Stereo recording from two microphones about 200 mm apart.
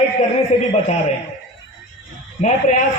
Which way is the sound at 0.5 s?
35° left (ahead or behind).